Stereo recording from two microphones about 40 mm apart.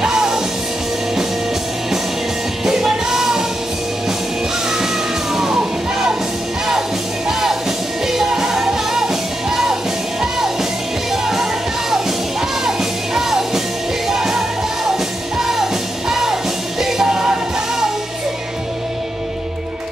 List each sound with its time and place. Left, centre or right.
0.0 s music: centre
2.6 s music: centre
4.6 s music: centre
7.2 s music: centre